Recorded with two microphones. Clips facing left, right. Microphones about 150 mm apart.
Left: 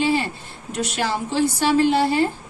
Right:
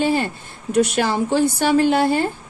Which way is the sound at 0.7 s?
55° right (ahead or behind).